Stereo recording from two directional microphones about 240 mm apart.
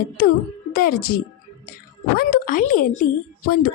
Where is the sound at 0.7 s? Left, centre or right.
Left.